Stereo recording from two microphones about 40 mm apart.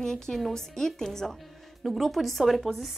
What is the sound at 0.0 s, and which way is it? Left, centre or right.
A woman's voice, centre.